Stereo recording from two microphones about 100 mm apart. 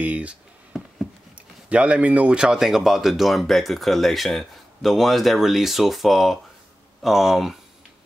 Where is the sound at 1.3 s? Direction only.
15° right (ahead or behind).